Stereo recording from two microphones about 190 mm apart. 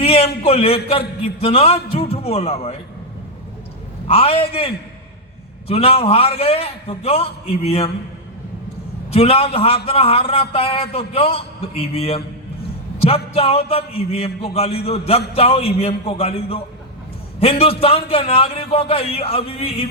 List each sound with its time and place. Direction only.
0.0 s a man's voice: 30° left (ahead or behind)
4.0 s a man's voice: 30° left (ahead or behind)
9.1 s a man's voice: 30° left (ahead or behind)